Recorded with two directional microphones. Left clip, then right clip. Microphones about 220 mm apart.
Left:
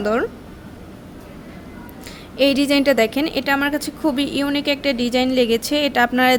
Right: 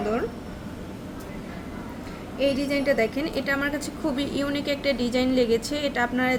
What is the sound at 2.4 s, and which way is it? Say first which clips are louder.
A woman's voice: left 8 dB; 45° left (ahead or behind).